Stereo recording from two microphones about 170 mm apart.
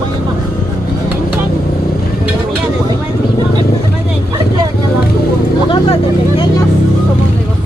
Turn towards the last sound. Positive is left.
turn(degrees=30)  # may be behind; listen again after turning